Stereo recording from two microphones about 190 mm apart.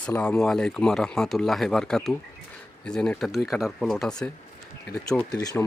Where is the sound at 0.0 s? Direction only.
5° left (ahead or behind).